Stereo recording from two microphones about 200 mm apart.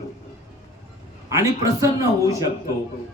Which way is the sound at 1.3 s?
15° right (ahead or behind).